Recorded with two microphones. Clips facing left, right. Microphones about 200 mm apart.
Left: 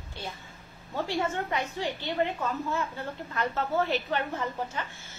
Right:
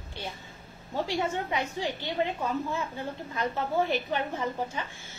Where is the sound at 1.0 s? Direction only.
15° right (ahead or behind).